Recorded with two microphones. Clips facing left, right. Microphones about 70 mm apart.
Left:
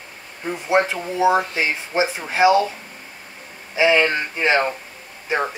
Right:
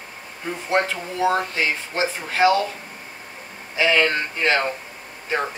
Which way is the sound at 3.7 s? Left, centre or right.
Centre.